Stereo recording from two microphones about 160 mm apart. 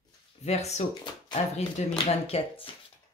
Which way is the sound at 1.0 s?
30° left (ahead or behind).